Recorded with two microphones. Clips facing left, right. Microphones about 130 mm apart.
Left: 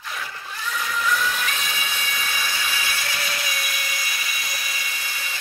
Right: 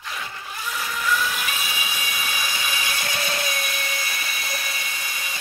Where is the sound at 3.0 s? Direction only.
25° right (ahead or behind).